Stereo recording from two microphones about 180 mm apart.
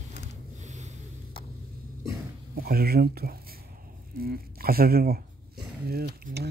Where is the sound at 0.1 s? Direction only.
70° left (ahead or behind).